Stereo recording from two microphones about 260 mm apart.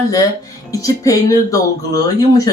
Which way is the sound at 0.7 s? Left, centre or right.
Centre.